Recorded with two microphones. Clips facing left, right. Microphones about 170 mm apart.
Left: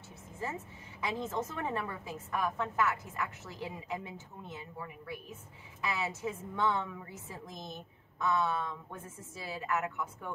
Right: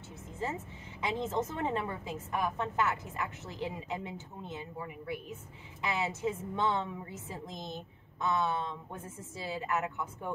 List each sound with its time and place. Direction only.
1.0 s a woman's voice: 20° right (ahead or behind)